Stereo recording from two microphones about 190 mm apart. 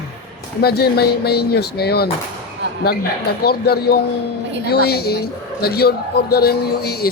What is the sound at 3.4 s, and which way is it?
A man's voice, 55° left (ahead or behind).